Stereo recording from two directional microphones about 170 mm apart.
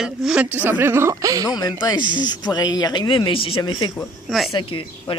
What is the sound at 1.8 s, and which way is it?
Speech, 25° left (ahead or behind).